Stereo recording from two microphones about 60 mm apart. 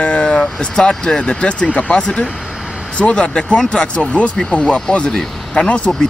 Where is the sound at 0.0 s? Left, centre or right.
Centre.